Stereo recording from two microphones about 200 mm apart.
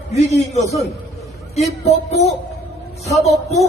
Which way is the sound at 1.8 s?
30° left (ahead or behind).